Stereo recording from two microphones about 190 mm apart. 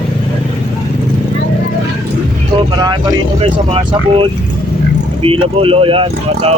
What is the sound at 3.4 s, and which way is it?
Speech, 30° right (ahead or behind).